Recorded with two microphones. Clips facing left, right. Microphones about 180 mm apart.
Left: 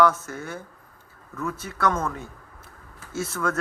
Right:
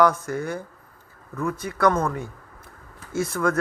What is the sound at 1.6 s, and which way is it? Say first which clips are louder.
Speech: right 5 dB; 5° left (ahead or behind).